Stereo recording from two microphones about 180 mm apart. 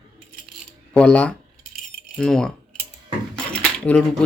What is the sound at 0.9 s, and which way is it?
Speech, 5° left (ahead or behind).